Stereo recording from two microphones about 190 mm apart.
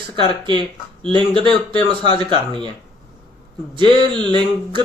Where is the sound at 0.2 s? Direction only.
25° right (ahead or behind).